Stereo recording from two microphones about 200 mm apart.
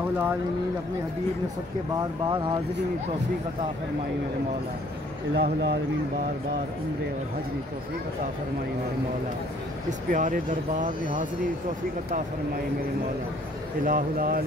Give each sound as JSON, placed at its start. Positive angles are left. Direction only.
{"t": 2.0, "sound": "speech", "side_deg": -20}
{"t": 5.3, "sound": "speech", "side_deg": -55}
{"t": 9.8, "sound": "speech", "side_deg": -40}
{"t": 13.8, "sound": "speech", "side_deg": -45}